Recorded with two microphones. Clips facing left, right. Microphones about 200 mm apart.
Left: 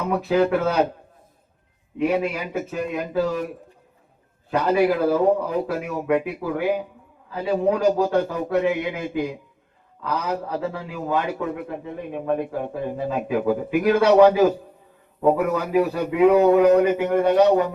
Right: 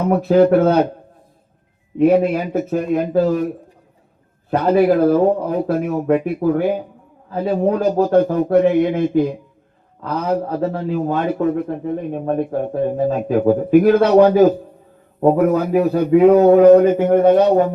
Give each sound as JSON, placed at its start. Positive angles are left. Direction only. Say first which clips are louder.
{"t": 0.1, "sound": "a man's voice", "louder": "right 7 dB", "side_deg": -55}
{"t": 2.0, "sound": "speech", "louder": "right 8 dB", "side_deg": -55}
{"t": 4.5, "sound": "speech", "louder": "right 5 dB", "side_deg": -55}
{"t": 12.5, "sound": "speech", "louder": "right 8 dB", "side_deg": -50}